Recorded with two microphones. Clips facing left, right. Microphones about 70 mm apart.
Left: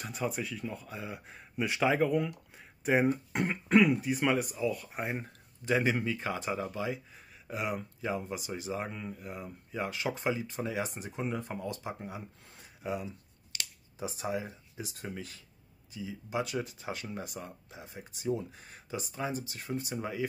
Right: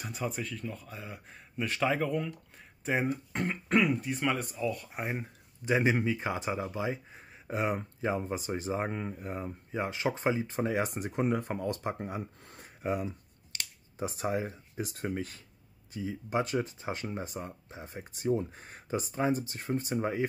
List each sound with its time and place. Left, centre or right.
0.0 s speech: centre
5.1 s speech: centre
7.4 s speech: right